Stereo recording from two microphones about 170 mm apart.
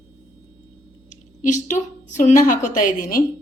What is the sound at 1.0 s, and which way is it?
A woman's voice, 45° left (ahead or behind).